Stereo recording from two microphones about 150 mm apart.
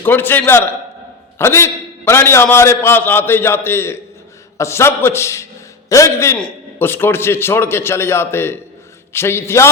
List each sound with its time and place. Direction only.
0.0 s a man's voice: 15° left (ahead or behind)